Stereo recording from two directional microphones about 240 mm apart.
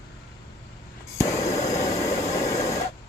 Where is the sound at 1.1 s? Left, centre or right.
Centre.